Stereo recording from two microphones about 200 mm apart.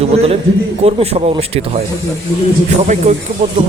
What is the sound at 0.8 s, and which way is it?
Speech, 30° right (ahead or behind).